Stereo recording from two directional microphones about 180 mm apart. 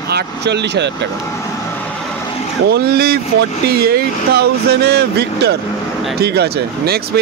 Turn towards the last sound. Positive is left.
turn(degrees=-60)  # may be behind; listen again after turning